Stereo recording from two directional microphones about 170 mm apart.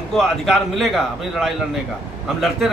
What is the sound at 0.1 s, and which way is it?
A man's voice, centre (ahead or behind).